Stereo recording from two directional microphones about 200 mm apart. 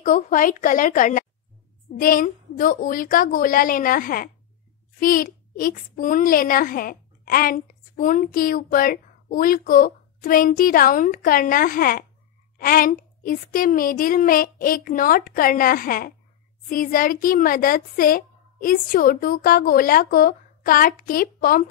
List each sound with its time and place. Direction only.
0.0 s a woman's voice: 40° left (ahead or behind)